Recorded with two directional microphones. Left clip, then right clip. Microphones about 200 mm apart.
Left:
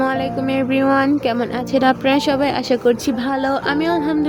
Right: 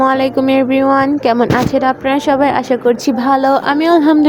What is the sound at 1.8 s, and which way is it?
Speech, 10° left (ahead or behind).